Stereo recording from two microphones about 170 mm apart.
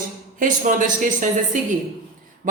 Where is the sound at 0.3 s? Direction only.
50° right (ahead or behind).